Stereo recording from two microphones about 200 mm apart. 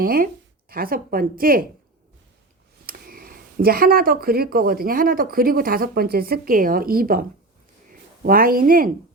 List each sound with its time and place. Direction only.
0.0 s a sound: 50° right (ahead or behind)
0.7 s speech: 45° right (ahead or behind)
2.8 s speech: 45° right (ahead or behind)